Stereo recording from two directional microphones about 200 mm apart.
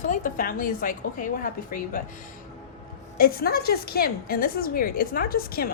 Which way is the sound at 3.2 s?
50° left (ahead or behind).